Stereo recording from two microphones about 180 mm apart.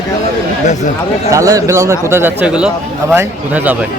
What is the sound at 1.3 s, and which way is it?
A man's voice, 20° right (ahead or behind).